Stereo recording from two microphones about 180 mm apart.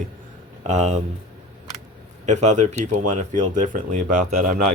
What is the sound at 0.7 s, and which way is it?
Speech, 40° right (ahead or behind).